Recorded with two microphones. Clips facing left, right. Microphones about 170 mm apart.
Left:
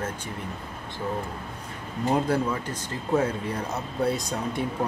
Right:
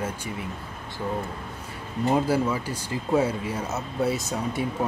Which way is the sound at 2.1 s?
5° right (ahead or behind).